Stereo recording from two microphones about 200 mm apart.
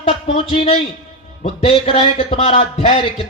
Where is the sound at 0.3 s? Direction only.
30° left (ahead or behind).